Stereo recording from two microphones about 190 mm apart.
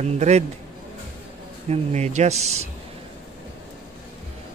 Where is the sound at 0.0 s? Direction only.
35° right (ahead or behind).